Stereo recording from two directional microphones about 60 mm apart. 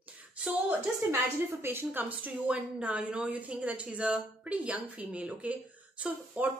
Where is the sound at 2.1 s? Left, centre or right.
Right.